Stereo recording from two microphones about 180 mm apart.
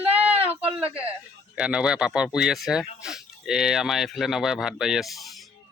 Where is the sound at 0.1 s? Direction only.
10° right (ahead or behind).